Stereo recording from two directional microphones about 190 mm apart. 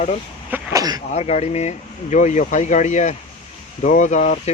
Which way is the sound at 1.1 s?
35° left (ahead or behind).